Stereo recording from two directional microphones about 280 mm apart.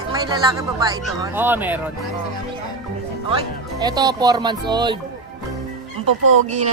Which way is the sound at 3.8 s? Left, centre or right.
Centre.